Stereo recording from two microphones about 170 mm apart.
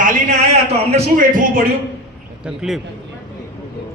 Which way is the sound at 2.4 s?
5° right (ahead or behind).